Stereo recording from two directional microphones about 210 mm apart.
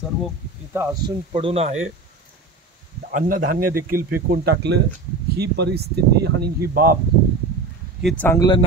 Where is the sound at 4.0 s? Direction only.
10° right (ahead or behind).